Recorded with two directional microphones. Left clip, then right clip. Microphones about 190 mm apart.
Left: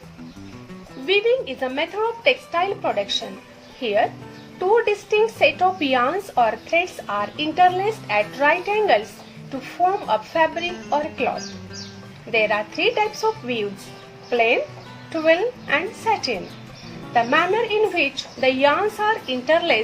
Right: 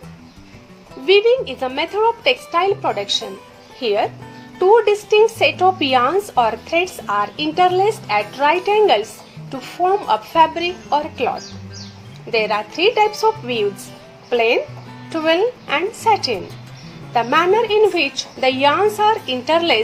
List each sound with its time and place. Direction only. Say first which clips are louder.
1.0 s a woman's voice: right 5 dB; 25° right (ahead or behind)
10.1 s a woman's voice: right 5 dB; 30° right (ahead or behind)